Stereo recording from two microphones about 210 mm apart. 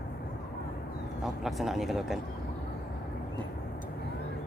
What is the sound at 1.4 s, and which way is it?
Speech, centre (ahead or behind).